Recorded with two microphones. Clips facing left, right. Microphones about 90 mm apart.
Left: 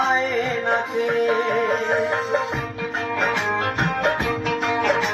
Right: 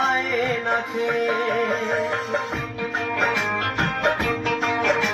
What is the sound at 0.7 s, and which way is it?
Music, 20° left (ahead or behind).